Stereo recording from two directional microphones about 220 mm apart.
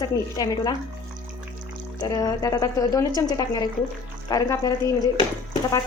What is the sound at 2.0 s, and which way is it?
A woman's voice, 20° left (ahead or behind).